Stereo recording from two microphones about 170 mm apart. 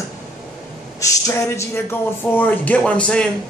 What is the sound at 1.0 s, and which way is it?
Speech, 20° left (ahead or behind).